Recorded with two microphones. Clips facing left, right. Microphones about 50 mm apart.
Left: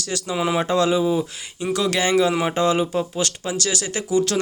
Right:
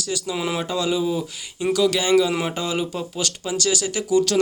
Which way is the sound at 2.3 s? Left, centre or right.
Centre.